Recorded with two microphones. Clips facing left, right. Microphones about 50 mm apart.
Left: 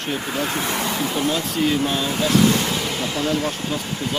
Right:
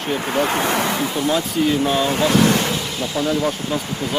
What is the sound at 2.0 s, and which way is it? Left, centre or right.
Speech, right.